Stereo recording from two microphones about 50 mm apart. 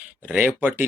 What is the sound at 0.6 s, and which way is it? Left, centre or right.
Speech, right.